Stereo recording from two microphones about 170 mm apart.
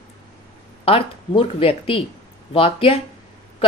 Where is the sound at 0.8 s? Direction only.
35° left (ahead or behind).